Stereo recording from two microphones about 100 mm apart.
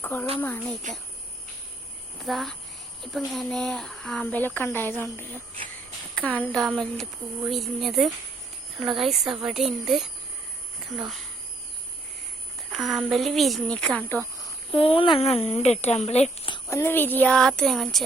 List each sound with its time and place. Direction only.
0.0 s speech: 20° left (ahead or behind)
2.1 s speech: centre (ahead or behind)
4.3 s speech: 15° left (ahead or behind); by 11.2 s centre (ahead or behind)
12.7 s speech: centre (ahead or behind); by 14.3 s 15° left (ahead or behind)
14.7 s speech: 65° left (ahead or behind); by 16.5 s 90° left
16.6 s speech: 25° left (ahead or behind)
17.3 s speech: 5° left (ahead or behind)